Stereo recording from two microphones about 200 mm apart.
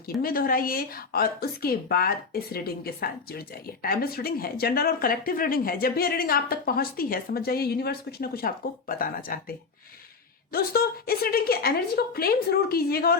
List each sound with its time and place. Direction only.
0.1 s speech: 50° left (ahead or behind)